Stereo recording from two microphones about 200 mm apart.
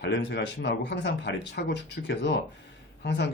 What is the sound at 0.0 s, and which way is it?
Speech, 55° left (ahead or behind).